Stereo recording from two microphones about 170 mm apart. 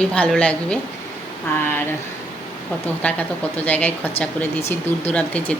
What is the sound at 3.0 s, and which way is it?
Speech, 10° left (ahead or behind).